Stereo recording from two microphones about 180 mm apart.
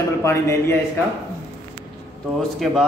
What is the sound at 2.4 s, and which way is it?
Speech, centre (ahead or behind).